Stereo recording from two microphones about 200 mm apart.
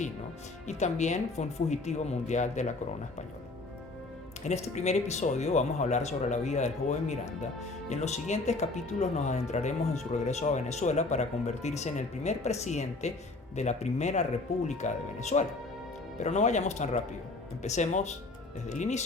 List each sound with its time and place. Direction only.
0.7 s speech: 35° left (ahead or behind)
4.4 s speech: 35° left (ahead or behind)